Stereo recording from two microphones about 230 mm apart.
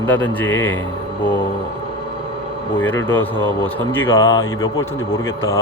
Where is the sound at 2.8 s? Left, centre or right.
Centre.